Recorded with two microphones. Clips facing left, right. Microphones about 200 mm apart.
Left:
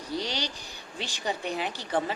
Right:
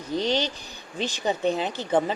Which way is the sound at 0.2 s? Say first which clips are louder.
Right 8 dB; 20° right (ahead or behind).